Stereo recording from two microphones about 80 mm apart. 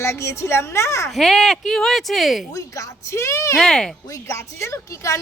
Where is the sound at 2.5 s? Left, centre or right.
Left.